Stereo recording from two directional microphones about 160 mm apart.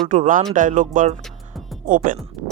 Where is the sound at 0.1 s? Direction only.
55° right (ahead or behind).